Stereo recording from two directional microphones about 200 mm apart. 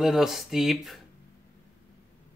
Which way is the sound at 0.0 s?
Centre (ahead or behind).